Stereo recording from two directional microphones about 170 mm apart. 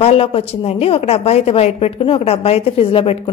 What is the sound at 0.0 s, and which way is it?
A woman's voice, 35° left (ahead or behind).